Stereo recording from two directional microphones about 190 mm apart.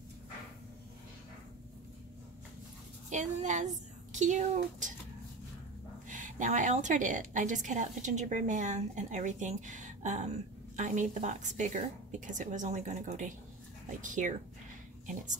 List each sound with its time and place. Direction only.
3.1 s speech: 40° right (ahead or behind)
6.0 s a woman's voice: 40° right (ahead or behind)